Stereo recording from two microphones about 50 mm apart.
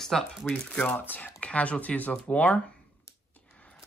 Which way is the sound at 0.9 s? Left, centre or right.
Left.